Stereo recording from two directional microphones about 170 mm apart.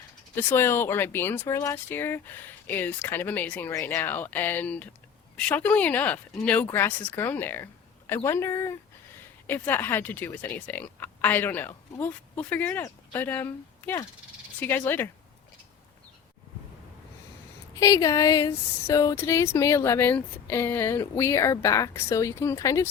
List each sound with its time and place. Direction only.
0.3 s speech: 15° left (ahead or behind)
17.7 s speech: 20° left (ahead or behind)